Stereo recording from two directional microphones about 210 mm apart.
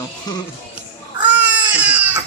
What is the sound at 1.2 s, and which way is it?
Baby cry, 5° right (ahead or behind).